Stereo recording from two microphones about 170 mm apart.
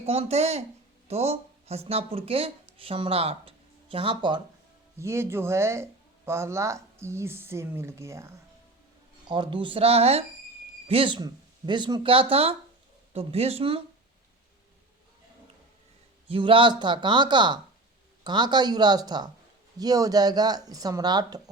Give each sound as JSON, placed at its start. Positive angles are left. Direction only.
{"t": 0.0, "sound": "speech", "side_deg": -35}
{"t": 4.9, "sound": "speech", "side_deg": -15}
{"t": 9.2, "sound": "speech", "side_deg": -25}
{"t": 16.3, "sound": "speech", "side_deg": -30}